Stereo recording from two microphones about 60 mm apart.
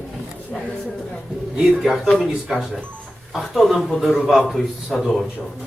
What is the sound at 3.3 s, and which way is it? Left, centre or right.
A man's voice, centre.